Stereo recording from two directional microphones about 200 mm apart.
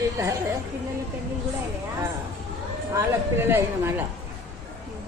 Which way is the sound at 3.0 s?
10° right (ahead or behind).